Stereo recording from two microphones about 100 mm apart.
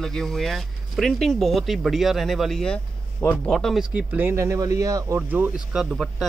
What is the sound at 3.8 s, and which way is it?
Speech, 15° right (ahead or behind).